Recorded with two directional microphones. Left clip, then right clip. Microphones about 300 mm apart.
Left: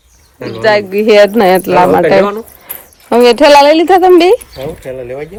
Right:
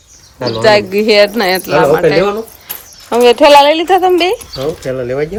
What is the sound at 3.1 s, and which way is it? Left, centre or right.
Speech, left.